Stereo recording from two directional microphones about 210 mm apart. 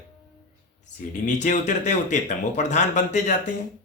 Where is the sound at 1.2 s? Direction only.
35° left (ahead or behind).